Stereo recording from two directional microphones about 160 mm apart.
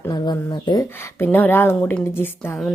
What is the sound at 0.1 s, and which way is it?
Speech, 25° left (ahead or behind).